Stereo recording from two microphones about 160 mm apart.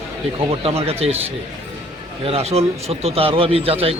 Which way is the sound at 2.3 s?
40° right (ahead or behind).